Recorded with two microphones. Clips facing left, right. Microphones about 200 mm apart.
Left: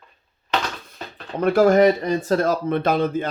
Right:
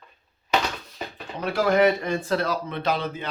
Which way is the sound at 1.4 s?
50° left (ahead or behind).